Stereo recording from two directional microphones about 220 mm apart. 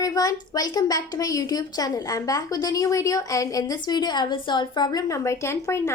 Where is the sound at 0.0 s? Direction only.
15° left (ahead or behind).